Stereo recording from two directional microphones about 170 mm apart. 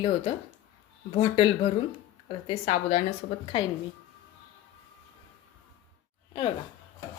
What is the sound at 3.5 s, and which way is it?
Speech, 35° left (ahead or behind).